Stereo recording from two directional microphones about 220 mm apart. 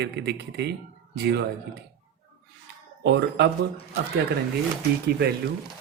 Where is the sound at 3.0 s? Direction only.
50° right (ahead or behind).